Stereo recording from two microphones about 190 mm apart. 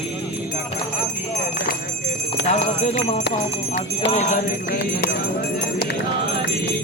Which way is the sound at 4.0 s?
30° left (ahead or behind).